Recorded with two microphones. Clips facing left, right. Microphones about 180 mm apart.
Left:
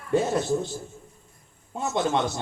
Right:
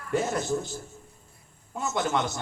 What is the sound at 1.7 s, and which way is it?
Speech, 25° left (ahead or behind).